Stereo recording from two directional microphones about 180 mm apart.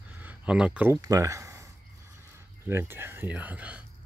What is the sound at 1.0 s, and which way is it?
Speech, 20° right (ahead or behind).